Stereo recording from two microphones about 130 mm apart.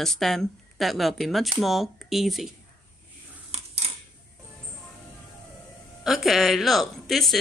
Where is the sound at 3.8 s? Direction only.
55° right (ahead or behind).